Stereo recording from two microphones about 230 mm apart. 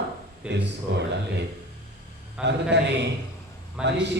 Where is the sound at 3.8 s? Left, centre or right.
Centre.